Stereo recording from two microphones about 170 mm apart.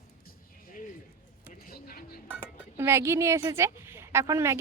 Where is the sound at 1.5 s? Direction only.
60° left (ahead or behind).